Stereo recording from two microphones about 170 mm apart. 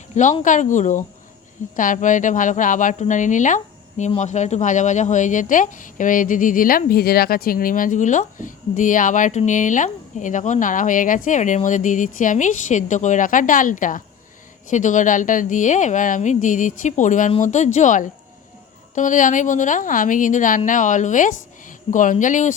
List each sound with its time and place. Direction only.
0.1 s a woman's voice: 45° left (ahead or behind)